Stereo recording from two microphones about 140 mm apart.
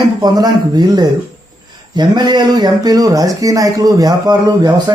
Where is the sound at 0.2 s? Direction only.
30° right (ahead or behind).